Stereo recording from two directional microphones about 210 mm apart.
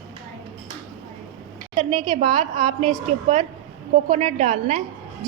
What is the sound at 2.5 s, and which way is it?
A woman's voice, 35° right (ahead or behind).